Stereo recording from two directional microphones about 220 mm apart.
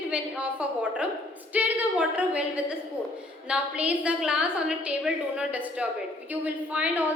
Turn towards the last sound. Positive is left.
turn(degrees=-5)  # may be behind; listen again after turning